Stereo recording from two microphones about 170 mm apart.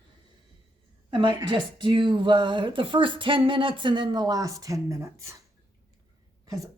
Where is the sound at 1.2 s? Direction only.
30° right (ahead or behind).